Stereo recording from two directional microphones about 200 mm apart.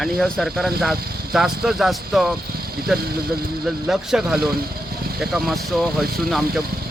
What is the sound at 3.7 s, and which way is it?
Speech, centre (ahead or behind).